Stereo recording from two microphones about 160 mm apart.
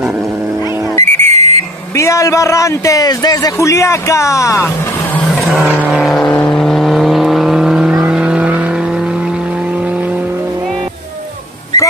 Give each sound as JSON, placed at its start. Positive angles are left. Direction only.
{"t": 1.0, "sound": "whistle", "side_deg": -45}
{"t": 2.0, "sound": "a man's voice", "side_deg": 20}
{"t": 5.7, "sound": "vehicle", "side_deg": -5}